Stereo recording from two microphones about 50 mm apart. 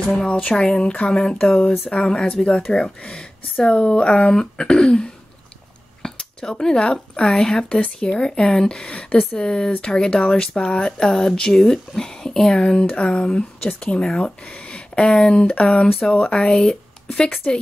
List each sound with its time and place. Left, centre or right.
0.1 s speech: centre
6.0 s a sound: centre
6.8 s speech: left
7.2 s speech: centre
8.9 s speech: left